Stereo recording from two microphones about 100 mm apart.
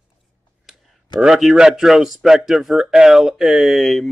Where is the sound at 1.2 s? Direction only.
Centre (ahead or behind).